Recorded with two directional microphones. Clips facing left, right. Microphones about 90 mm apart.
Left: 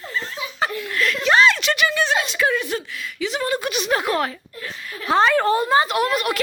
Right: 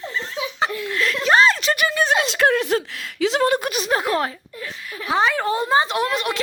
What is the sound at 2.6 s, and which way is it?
Speech, 80° right.